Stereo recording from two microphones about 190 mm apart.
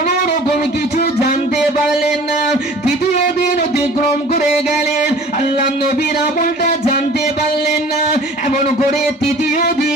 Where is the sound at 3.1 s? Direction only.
45° left (ahead or behind).